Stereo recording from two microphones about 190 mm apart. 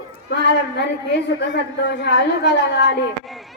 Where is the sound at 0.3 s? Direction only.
60° left (ahead or behind).